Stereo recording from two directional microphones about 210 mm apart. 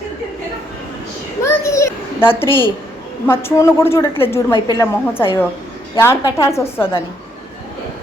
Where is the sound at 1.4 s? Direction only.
15° left (ahead or behind).